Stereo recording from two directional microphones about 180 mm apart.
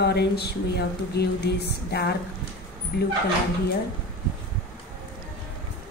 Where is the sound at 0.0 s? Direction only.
65° left (ahead or behind).